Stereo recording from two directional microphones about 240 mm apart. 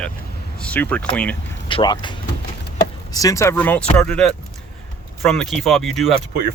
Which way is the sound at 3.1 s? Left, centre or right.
Centre.